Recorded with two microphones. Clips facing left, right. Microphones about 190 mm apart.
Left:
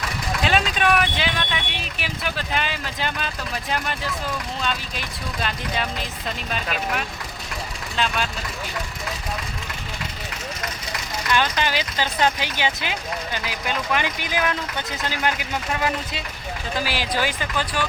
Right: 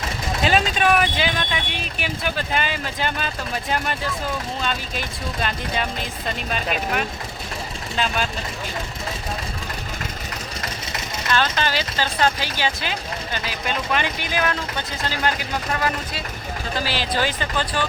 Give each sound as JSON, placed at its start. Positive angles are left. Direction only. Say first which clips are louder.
{"t": 0.4, "sound": "vehicle", "louder": "right 2 dB", "side_deg": 0}
{"t": 0.8, "sound": "speech", "louder": "right 2 dB", "side_deg": 0}
{"t": 10.6, "sound": "vehicle", "louder": "right 1 dB", "side_deg": -25}
{"t": 11.3, "sound": "speech", "louder": "even", "side_deg": 15}